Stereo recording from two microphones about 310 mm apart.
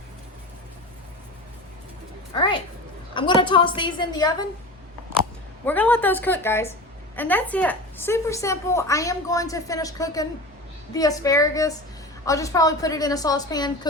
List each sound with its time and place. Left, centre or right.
2.3 s a woman's voice: centre
5.6 s a woman's voice: centre